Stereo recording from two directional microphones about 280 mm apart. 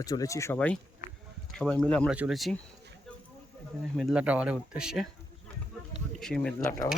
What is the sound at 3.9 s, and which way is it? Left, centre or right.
Speech, centre.